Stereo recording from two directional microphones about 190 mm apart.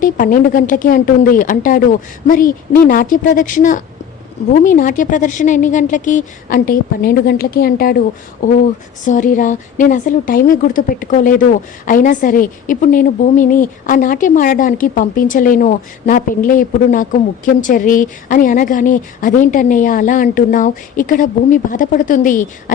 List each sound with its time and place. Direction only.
0.0 s a woman's voice: 45° left (ahead or behind)